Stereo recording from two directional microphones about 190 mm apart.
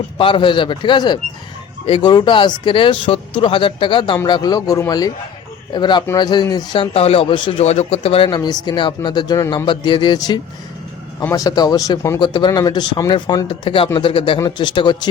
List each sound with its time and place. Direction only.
0.2 s speech: 25° left (ahead or behind)
6.9 s speech: 30° left (ahead or behind)